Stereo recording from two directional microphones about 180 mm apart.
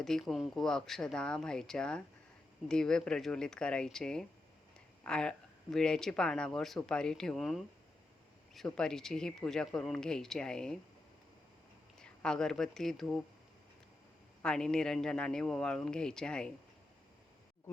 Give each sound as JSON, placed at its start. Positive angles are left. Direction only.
{"t": 0.0, "sound": "speech", "side_deg": 0}
{"t": 11.9, "sound": "speech", "side_deg": 5}
{"t": 14.4, "sound": "speech", "side_deg": 5}